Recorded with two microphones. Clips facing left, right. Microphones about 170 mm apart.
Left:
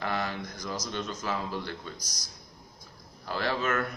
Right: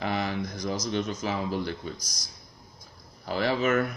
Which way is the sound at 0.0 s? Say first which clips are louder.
Right 3 dB; 20° right (ahead or behind).